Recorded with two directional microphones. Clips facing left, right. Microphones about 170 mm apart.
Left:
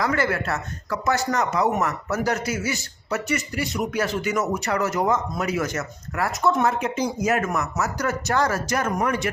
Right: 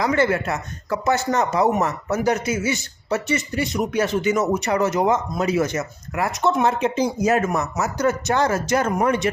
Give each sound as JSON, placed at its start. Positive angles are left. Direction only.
{"t": 0.0, "sound": "speech", "side_deg": -20}